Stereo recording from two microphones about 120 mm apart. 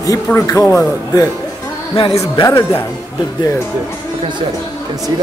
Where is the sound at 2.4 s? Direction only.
25° left (ahead or behind).